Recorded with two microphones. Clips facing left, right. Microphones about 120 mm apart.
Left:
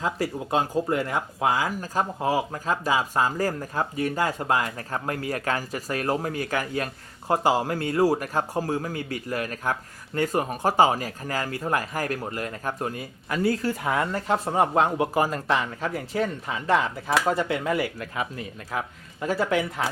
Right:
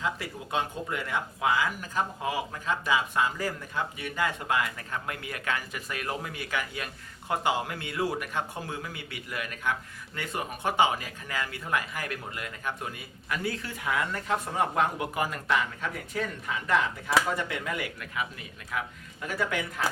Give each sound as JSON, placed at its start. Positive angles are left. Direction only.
{"t": 0.0, "sound": "speech", "side_deg": 35}